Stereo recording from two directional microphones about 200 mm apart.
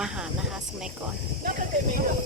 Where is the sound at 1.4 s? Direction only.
45° right (ahead or behind).